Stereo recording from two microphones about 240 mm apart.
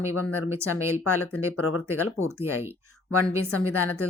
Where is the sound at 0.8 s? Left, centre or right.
Left.